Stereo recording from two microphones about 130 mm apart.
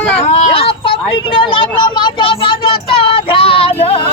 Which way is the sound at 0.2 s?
45° left (ahead or behind).